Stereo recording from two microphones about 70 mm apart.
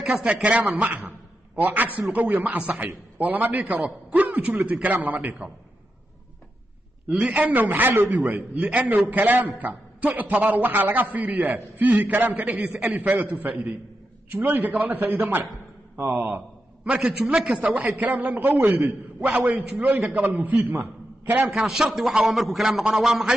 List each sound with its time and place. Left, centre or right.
0.0 s a man's voice: centre
0.3 s a man's voice: centre
0.8 s a sound: right
2.1 s a man's voice: right
7.1 s a man's voice: centre
16.8 s a man's voice: centre
17.9 s a man's voice: right
21.5 s a man's voice: centre